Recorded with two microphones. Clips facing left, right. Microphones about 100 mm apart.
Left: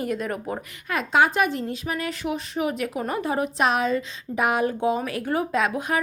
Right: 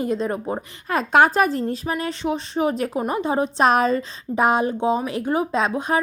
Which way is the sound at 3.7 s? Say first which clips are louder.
Right 4 dB; 40° right (ahead or behind).